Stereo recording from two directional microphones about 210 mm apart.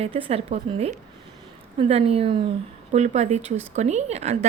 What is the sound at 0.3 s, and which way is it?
A woman's voice, 30° right (ahead or behind).